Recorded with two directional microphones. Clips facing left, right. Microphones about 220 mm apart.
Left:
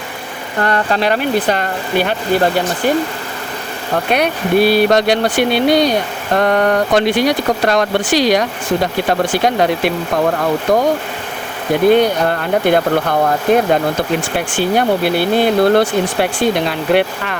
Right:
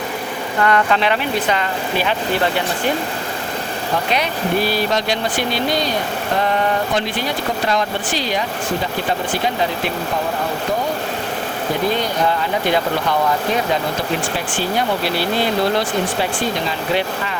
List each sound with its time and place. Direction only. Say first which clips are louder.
0.6 s speech: left 1 dB; 40° left (ahead or behind)
4.1 s speech: left 7 dB; 65° left (ahead or behind)
11.9 s speech: left 10 dB; 60° left (ahead or behind)